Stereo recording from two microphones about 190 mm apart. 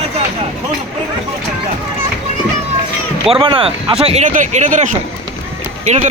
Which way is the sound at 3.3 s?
30° right (ahead or behind).